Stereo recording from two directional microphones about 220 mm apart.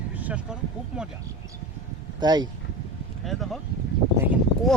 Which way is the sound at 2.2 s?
20° right (ahead or behind).